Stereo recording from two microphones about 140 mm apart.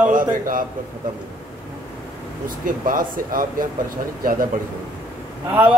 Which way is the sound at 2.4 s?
75° right (ahead or behind).